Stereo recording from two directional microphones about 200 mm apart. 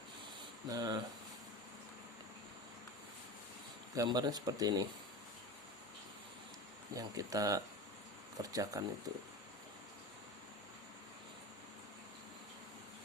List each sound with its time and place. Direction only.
0.7 s speech: 20° right (ahead or behind)
3.9 s speech: 20° right (ahead or behind)
6.9 s speech: 15° right (ahead or behind)